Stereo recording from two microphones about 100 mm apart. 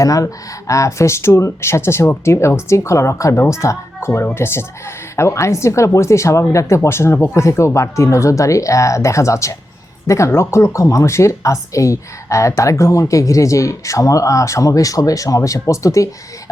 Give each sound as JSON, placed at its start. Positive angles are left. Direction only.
{"t": 0.0, "sound": "a woman's voice", "side_deg": 35}